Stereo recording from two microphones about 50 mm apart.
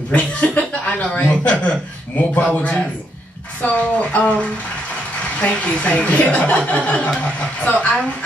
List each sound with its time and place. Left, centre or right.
0.1 s a woman's voice: left